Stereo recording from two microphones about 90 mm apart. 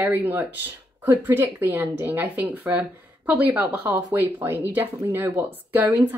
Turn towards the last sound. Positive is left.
turn(degrees=-20)  # may be behind; listen again after turning